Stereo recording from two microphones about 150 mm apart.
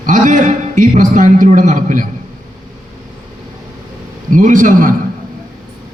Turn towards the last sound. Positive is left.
turn(degrees=-60)  # may be behind; listen again after turning